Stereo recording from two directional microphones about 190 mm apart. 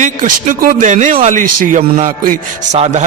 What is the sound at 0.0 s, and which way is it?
A man's voice, 40° right (ahead or behind).